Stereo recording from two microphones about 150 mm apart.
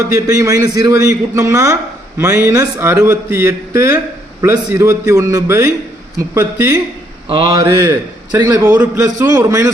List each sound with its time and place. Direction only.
0.1 s speech: 20° right (ahead or behind)
7.3 s speech: 30° right (ahead or behind)